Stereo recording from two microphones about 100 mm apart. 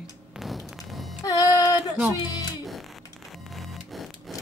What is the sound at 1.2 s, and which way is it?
Music, 35° left (ahead or behind).